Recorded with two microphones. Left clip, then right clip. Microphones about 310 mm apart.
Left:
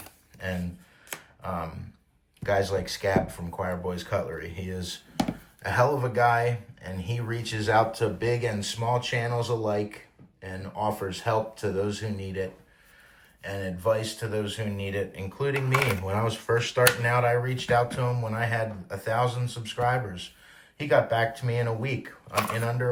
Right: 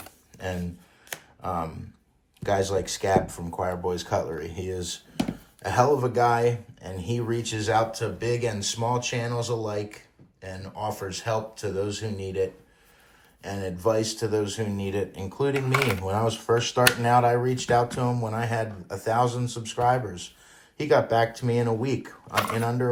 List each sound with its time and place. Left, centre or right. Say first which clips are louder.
0.0 s a sound: right 1 dB; centre
2.4 s speech: right 1 dB; centre
15.6 s speech: right 1 dB; centre